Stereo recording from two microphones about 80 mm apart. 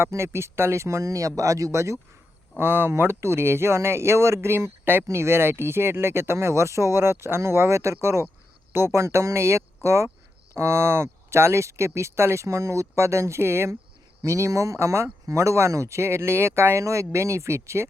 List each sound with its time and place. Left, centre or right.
0.0 s speech: right